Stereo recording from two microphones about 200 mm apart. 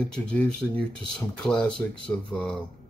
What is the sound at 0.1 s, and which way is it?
A man's voice, 5° left (ahead or behind).